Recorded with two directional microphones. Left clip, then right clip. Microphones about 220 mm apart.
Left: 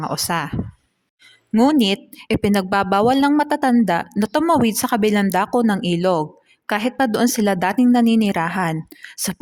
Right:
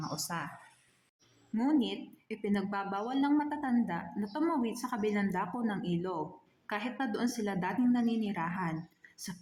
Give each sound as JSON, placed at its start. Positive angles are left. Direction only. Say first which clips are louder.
{"t": 0.0, "sound": "speech", "louder": "left 16 dB", "side_deg": 40}
{"t": 1.5, "sound": "speech", "louder": "left 15 dB", "side_deg": 50}